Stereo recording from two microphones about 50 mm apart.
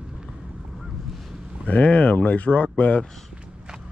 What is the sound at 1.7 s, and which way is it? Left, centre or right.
Speech, left.